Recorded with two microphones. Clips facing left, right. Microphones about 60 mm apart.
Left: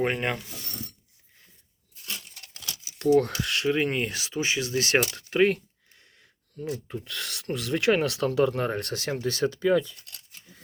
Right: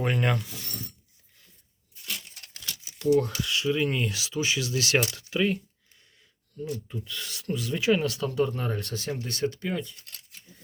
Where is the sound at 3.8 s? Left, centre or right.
Left.